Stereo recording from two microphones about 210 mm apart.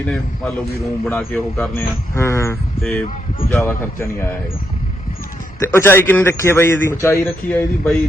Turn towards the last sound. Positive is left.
turn(degrees=10)  # may be behind; listen again after turning